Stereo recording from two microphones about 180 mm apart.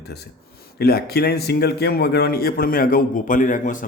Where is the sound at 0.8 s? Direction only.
60° left (ahead or behind).